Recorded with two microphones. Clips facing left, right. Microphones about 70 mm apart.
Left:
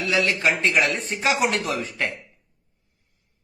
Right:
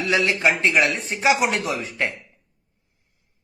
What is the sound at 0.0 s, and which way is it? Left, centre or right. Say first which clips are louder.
Chopping: right 1 dB; right.